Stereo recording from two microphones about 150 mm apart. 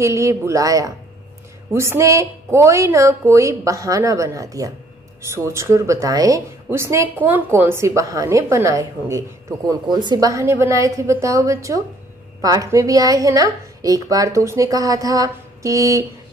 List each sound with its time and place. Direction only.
0.0 s a woman's voice: 20° right (ahead or behind)